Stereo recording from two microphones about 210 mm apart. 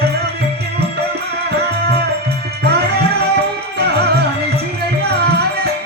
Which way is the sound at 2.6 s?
50° right (ahead or behind).